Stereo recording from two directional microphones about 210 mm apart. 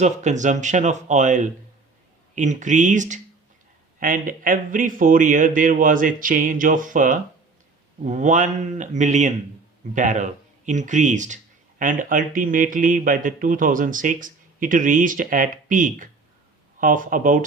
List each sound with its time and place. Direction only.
0.0 s speech: 35° right (ahead or behind)